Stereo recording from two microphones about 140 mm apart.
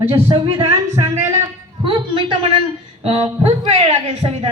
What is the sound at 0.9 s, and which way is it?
Speech, 20° right (ahead or behind).